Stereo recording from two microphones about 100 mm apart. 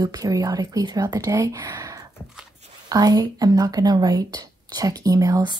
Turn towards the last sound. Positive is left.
turn(degrees=-35)  # may be behind; listen again after turning